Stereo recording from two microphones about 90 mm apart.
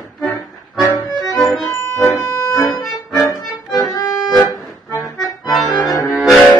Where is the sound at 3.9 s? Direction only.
40° left (ahead or behind).